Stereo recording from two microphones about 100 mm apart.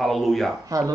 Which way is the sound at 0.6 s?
35° right (ahead or behind).